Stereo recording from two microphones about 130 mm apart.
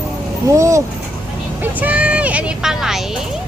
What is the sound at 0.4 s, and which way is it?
Speech, 25° right (ahead or behind).